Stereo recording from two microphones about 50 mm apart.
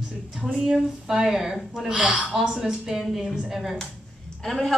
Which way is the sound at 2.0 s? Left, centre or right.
Right.